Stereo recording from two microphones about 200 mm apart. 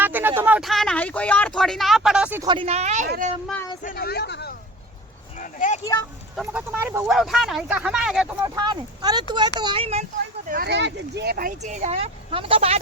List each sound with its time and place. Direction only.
0.0 s speech: 10° right (ahead or behind)
2.4 s speech: 25° right (ahead or behind)
3.8 s speech: 50° left (ahead or behind)
5.4 s speech: 40° left (ahead or behind)
5.8 s speech: 15° left (ahead or behind)
6.3 s speech: 5° right (ahead or behind)
8.4 s speech: 20° right (ahead or behind)
10.5 s speech: 55° right (ahead or behind)
11.6 s speech: 35° right (ahead or behind)